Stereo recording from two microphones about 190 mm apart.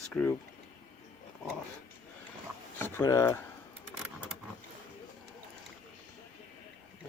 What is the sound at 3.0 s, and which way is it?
Speech, 15° left (ahead or behind).